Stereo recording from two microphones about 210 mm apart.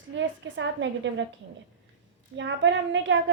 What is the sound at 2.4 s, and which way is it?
Speech, 60° right (ahead or behind).